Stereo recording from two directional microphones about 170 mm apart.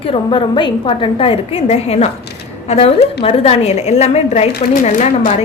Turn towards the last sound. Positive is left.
turn(degrees=45)  # may be behind; listen again after turning